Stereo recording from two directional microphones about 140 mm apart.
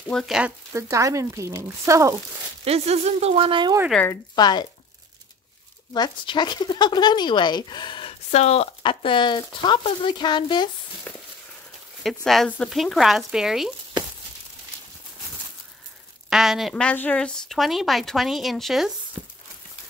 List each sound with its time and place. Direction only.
0.1 s speech: 5° left (ahead or behind)
0.7 s speech: 20° right (ahead or behind)
2.6 s speech: 45° right (ahead or behind)
4.1 s speech: 30° left (ahead or behind)
5.9 s speech: 30° left (ahead or behind); by 8.6 s 50° left (ahead or behind)
8.8 s speech: 35° left (ahead or behind)
12.0 s speech: centre (ahead or behind)
16.3 s speech: 5° right (ahead or behind)